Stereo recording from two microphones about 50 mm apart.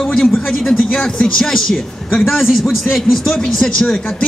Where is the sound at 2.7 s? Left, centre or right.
Centre.